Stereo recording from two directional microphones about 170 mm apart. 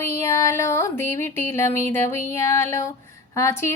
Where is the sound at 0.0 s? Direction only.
15° left (ahead or behind).